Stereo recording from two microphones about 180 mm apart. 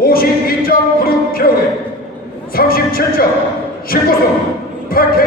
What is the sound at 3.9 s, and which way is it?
A man's voice, 55° left (ahead or behind).